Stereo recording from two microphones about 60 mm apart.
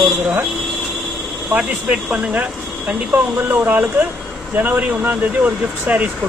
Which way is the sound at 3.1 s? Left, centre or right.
Right.